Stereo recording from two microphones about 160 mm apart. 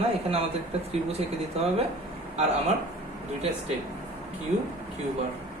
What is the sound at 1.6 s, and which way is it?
Speech, 40° right (ahead or behind).